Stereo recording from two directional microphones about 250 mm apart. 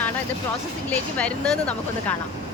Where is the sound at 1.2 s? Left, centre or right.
Centre.